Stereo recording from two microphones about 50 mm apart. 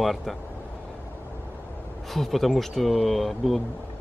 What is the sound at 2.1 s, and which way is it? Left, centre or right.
Speech, centre.